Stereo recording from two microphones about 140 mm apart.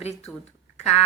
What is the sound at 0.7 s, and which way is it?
Duck, 50° left (ahead or behind).